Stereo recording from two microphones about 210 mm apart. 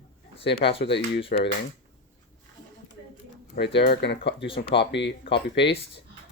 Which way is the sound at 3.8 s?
55° left (ahead or behind).